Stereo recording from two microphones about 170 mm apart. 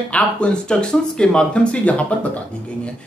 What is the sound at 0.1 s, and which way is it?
Speech, 5° left (ahead or behind).